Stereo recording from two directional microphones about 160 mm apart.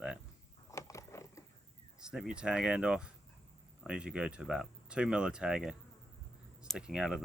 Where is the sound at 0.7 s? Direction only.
20° left (ahead or behind).